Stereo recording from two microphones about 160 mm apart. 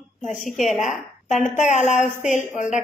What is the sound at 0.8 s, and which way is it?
A woman's voice, 50° left (ahead or behind).